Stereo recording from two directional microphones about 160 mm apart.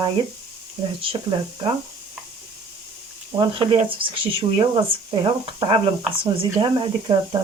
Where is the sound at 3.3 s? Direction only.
30° right (ahead or behind).